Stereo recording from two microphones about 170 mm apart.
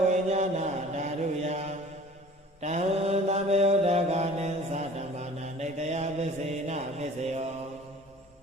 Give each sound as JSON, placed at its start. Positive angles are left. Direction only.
{"t": 0.1, "sound": "mantra", "side_deg": -40}